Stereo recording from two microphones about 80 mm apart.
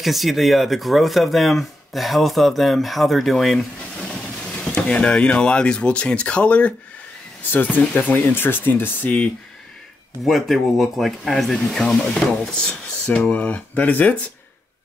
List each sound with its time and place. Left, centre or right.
0.0 s speech: centre
10.2 s speech: centre; by 14.1 s left